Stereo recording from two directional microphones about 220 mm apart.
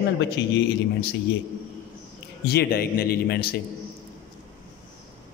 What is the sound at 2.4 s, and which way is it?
A man's voice, 45° left (ahead or behind).